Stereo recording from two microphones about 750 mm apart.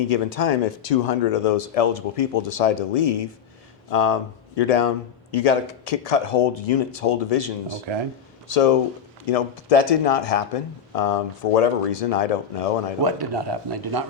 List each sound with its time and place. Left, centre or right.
0.1 s speech: left
13.0 s speech: right